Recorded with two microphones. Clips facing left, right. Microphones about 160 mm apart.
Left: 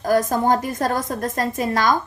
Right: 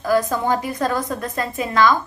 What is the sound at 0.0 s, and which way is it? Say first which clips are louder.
A woman's voice: left 1 dB; 45° left (ahead or behind).